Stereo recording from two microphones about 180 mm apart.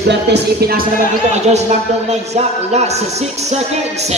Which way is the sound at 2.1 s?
35° right (ahead or behind).